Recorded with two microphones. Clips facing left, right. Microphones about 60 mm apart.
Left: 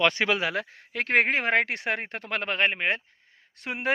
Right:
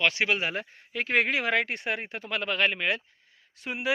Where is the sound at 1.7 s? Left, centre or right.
Left.